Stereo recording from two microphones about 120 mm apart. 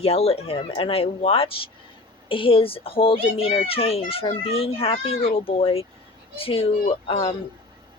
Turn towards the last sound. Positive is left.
turn(degrees=45)  # may be behind; listen again after turning